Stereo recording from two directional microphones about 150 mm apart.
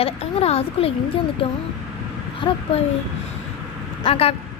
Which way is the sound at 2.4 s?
35° left (ahead or behind).